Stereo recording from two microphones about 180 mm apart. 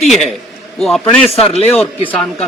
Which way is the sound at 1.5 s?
35° left (ahead or behind).